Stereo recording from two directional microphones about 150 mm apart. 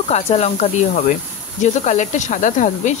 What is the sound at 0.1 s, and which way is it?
Speech, 45° left (ahead or behind).